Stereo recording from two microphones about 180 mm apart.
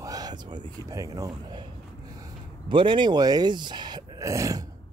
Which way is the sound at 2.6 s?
25° right (ahead or behind).